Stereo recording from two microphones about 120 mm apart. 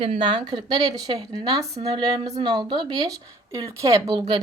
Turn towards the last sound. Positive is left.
turn(degrees=-40)  # may be behind; listen again after turning